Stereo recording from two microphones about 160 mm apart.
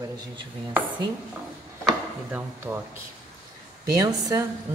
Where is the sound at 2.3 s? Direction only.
10° right (ahead or behind).